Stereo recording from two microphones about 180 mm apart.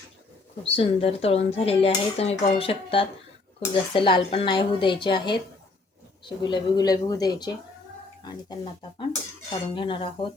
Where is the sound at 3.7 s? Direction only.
30° left (ahead or behind).